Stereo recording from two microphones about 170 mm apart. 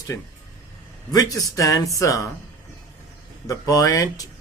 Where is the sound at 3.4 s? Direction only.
20° left (ahead or behind).